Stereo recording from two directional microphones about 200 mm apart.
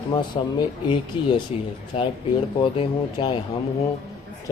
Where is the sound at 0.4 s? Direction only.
25° left (ahead or behind).